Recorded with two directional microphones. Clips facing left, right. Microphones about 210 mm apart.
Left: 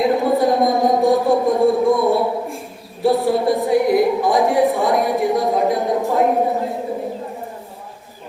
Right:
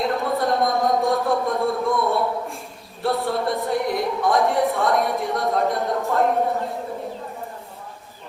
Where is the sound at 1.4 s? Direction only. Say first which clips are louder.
Left 7 dB; 20° left (ahead or behind).